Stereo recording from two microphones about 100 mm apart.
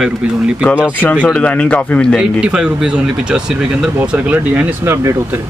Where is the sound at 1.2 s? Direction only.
15° left (ahead or behind).